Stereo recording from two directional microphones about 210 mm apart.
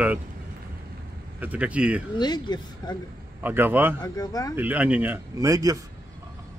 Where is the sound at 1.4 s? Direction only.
5° right (ahead or behind).